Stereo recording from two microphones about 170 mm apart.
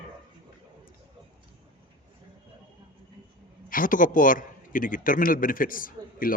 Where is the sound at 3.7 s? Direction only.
55° left (ahead or behind).